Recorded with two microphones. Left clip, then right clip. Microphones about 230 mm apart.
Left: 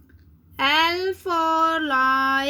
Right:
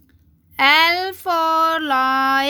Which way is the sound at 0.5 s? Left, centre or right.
Right.